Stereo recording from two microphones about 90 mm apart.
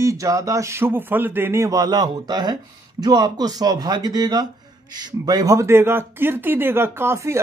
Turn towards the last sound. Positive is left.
turn(degrees=-30)  # may be behind; listen again after turning